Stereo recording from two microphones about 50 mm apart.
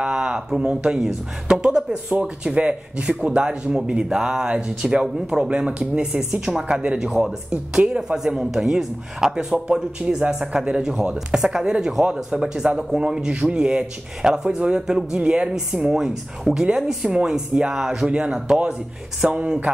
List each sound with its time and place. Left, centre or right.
0.0 s a sound: right
0.5 s speech: centre
6.8 s speech: right
7.1 s speech: centre